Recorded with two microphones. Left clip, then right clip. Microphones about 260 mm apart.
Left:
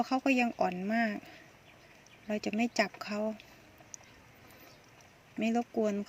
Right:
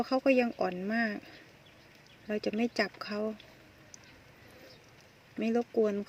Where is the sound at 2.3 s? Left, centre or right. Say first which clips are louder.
Right 1 dB; centre.